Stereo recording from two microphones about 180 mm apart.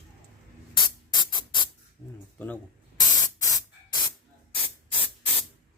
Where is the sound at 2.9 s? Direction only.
20° left (ahead or behind).